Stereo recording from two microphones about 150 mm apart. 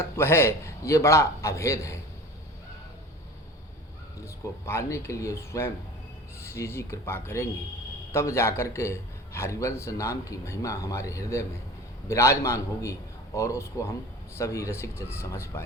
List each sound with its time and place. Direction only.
0.0 s a man's voice: 15° left (ahead or behind)
4.6 s a man's voice: 20° left (ahead or behind)